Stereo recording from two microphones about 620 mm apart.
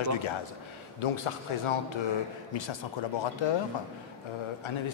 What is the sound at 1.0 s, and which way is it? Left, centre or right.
Mantra, left.